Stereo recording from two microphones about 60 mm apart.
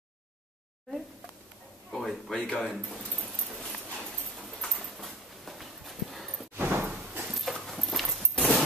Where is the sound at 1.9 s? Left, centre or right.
Centre.